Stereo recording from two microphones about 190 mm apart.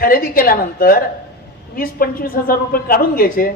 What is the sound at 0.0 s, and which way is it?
Speech, 50° left (ahead or behind).